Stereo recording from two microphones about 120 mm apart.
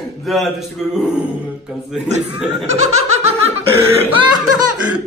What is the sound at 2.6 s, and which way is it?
Laughter, 65° right (ahead or behind).